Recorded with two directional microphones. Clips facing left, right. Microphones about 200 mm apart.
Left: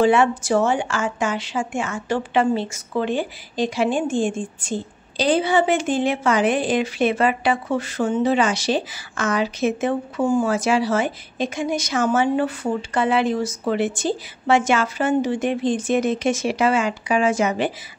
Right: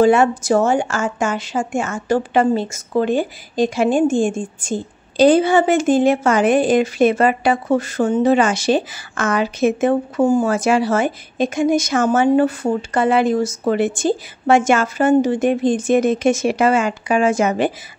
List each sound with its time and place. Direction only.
0.0 s a woman's voice: 40° right (ahead or behind)